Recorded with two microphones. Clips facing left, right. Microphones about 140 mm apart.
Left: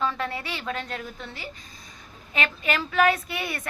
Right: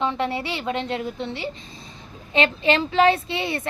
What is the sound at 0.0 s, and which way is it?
Speech, 25° right (ahead or behind).